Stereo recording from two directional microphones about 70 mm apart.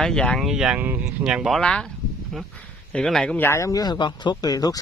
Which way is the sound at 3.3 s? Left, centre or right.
Left.